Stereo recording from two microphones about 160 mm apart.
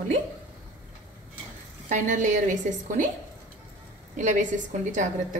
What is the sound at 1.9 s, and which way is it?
A woman's voice, 50° right (ahead or behind).